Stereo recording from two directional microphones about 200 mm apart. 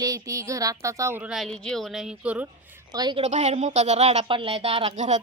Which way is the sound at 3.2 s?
35° right (ahead or behind).